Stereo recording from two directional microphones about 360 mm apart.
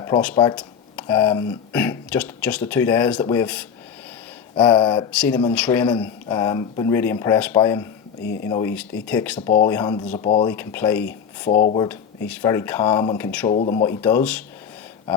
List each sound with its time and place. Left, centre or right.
0.0 s speech: centre
8.2 s speech: left
8.4 s speech: centre
11.0 s speech: left
11.8 s speech: centre
13.5 s speech: centre